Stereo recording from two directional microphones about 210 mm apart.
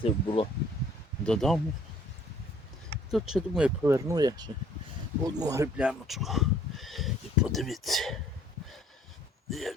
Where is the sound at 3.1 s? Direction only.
Centre (ahead or behind).